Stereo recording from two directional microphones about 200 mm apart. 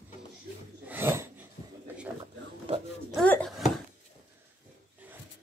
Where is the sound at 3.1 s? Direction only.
Centre (ahead or behind).